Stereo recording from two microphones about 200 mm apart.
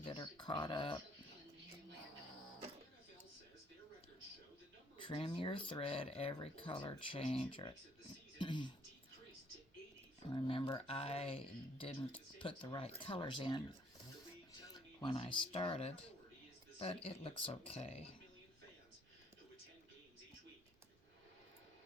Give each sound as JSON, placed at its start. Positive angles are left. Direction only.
{"t": 0.0, "sound": "a sound", "side_deg": 20}
{"t": 4.9, "sound": "speech", "side_deg": 25}
{"t": 8.4, "sound": "music", "side_deg": 25}
{"t": 10.3, "sound": "speech", "side_deg": 25}
{"t": 14.7, "sound": "a sound", "side_deg": 25}
{"t": 15.5, "sound": "speech", "side_deg": 25}